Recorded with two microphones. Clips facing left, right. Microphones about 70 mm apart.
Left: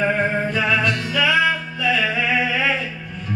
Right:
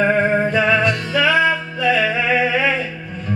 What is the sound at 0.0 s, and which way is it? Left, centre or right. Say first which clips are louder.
Music: right 4 dB; right.